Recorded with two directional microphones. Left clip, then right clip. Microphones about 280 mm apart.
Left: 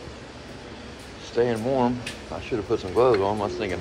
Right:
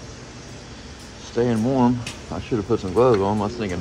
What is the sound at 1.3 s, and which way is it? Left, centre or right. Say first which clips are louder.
Speech: right 1 dB; centre.